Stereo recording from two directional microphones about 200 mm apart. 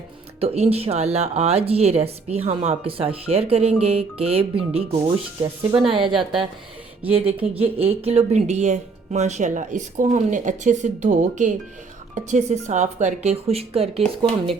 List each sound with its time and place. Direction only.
0.3 s speech: 30° right (ahead or behind)